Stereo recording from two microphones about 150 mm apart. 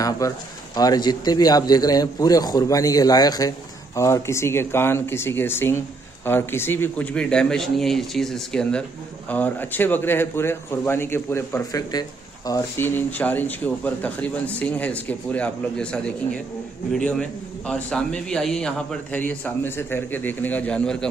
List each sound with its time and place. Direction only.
0.2 s a man's voice: 25° left (ahead or behind); by 21.1 s 5° left (ahead or behind)